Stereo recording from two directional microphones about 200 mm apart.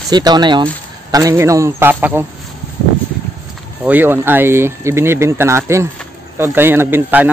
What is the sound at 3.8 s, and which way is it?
Speech, 10° right (ahead or behind).